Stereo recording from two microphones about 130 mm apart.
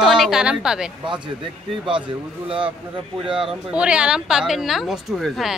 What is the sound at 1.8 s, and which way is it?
A man's voice, 40° right (ahead or behind).